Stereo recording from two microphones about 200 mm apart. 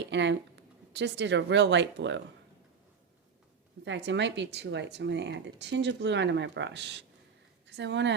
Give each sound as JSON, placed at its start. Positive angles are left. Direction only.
{"t": 0.0, "sound": "speech", "side_deg": -60}
{"t": 3.8, "sound": "speech", "side_deg": -60}